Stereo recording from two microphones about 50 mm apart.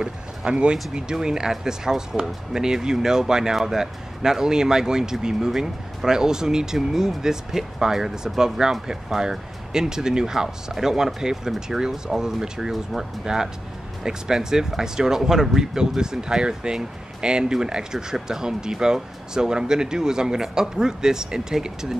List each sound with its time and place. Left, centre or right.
0.0 s speech: centre